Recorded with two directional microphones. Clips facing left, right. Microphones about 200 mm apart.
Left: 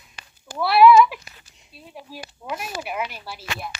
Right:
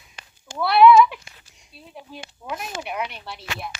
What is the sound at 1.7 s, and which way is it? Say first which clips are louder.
A woman's voice: left 1 dB; centre (ahead or behind).